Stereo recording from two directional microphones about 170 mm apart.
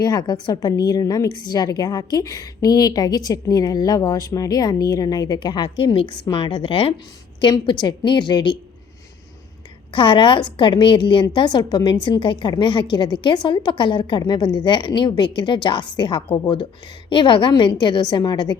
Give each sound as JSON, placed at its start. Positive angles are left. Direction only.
{"t": 0.0, "sound": "a woman's voice", "side_deg": 25}
{"t": 9.9, "sound": "a woman's voice", "side_deg": 30}